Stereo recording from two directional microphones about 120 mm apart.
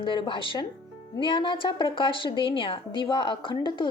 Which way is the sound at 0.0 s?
45° left (ahead or behind).